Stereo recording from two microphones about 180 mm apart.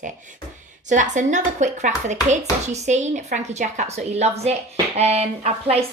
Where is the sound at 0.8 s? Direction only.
40° right (ahead or behind).